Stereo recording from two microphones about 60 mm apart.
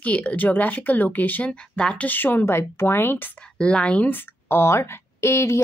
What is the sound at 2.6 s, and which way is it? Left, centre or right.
Speech, left.